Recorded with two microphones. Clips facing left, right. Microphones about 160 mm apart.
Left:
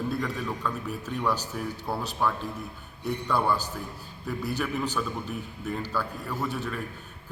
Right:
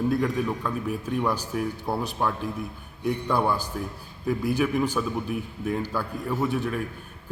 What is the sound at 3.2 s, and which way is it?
A man's voice, 15° right (ahead or behind).